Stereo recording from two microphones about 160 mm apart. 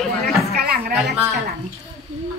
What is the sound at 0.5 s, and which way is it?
Speech, 75° right (ahead or behind).